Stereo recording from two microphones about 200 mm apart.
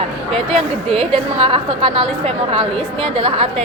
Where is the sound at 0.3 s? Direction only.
30° right (ahead or behind).